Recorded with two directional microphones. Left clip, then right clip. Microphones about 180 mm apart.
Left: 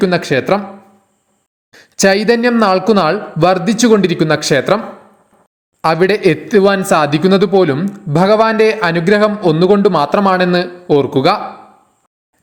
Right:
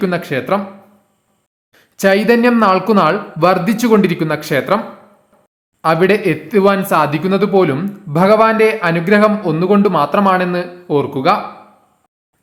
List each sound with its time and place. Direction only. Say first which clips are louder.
0.0 s speech: left 5 dB; 20° left (ahead or behind)
1.7 s speech: left 1 dB; 25° left (ahead or behind)
5.8 s speech: left 1 dB; 30° left (ahead or behind)